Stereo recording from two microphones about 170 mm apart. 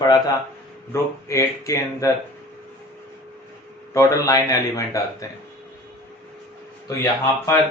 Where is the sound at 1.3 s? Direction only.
20° left (ahead or behind).